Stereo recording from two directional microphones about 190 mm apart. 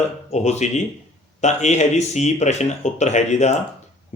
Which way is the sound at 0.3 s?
35° left (ahead or behind).